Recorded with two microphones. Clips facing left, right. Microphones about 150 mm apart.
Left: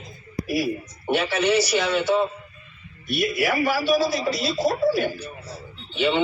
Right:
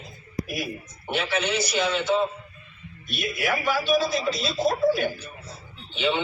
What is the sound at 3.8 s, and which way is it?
Speech, 50° right (ahead or behind).